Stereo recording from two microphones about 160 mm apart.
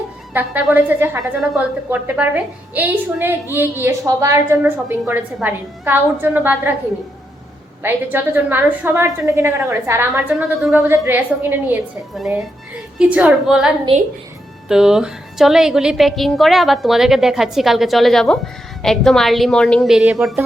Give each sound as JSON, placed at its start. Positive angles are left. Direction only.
{"t": 0.3, "sound": "a woman's voice", "side_deg": -10}
{"t": 7.8, "sound": "a woman's voice", "side_deg": -15}
{"t": 10.3, "sound": "a woman's voice", "side_deg": 0}
{"t": 10.8, "sound": "a woman's voice", "side_deg": -15}
{"t": 12.1, "sound": "a woman's voice", "side_deg": 0}
{"t": 14.7, "sound": "a woman's voice", "side_deg": -5}